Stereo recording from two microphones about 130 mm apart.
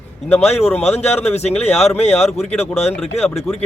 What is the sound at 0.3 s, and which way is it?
Speech, 10° left (ahead or behind).